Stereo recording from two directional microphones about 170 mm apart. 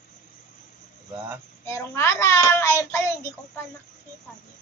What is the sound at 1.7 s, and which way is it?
A child's voice, 15° left (ahead or behind).